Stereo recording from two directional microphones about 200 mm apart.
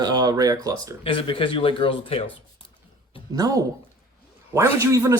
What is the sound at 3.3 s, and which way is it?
Speech, 15° right (ahead or behind).